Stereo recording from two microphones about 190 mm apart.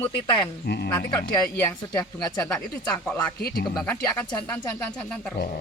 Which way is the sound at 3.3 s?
55° left (ahead or behind).